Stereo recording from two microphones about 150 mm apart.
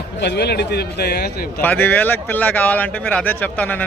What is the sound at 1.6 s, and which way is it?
Speech, 10° left (ahead or behind).